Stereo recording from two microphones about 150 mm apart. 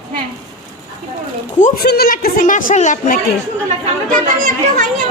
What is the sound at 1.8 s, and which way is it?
Speech, 90° left.